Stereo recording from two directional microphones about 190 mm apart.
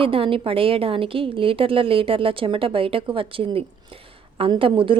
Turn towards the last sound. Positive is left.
turn(degrees=-25)  # may be behind; listen again after turning